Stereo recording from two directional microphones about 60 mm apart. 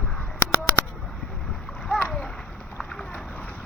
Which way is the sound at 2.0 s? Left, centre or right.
Centre.